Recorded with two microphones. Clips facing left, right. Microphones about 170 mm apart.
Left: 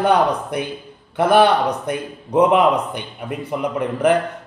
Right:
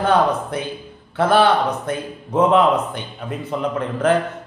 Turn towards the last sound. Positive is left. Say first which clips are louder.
# left 1 dB
turn(degrees=15)  # may be behind; listen again after turning